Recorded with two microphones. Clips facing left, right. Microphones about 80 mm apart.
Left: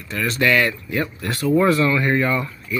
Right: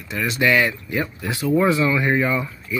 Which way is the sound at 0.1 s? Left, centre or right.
Centre.